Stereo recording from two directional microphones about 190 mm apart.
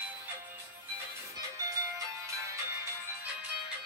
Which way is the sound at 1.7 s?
15° right (ahead or behind).